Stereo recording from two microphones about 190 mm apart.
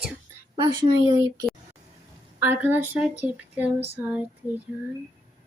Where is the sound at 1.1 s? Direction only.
20° right (ahead or behind).